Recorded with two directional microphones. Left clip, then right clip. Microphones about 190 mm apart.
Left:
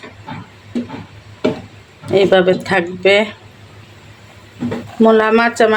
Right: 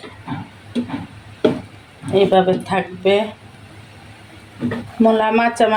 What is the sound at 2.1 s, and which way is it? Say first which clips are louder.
Speech: left 3 dB; 50° left (ahead or behind).